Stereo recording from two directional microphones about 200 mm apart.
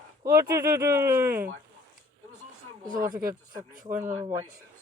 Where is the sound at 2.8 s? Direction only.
40° right (ahead or behind).